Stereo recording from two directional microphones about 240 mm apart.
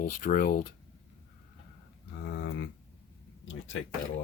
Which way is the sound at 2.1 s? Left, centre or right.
Left.